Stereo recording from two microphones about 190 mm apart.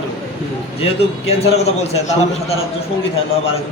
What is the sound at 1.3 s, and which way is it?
Speech, 35° left (ahead or behind).